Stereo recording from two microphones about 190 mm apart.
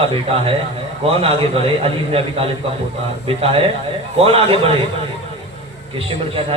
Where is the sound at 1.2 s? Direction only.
30° right (ahead or behind).